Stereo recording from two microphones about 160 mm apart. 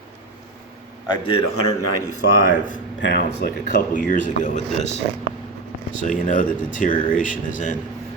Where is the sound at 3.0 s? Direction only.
90° left; by 4.9 s 50° left (ahead or behind).